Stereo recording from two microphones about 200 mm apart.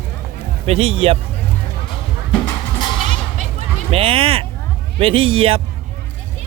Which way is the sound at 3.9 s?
30° right (ahead or behind).